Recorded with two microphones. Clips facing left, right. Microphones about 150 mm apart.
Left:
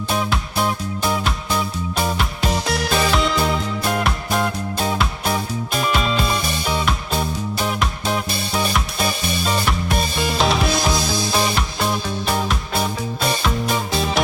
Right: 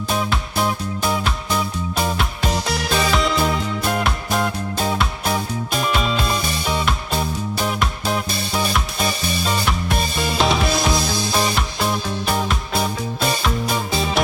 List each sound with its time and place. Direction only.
0.1 s music: centre (ahead or behind)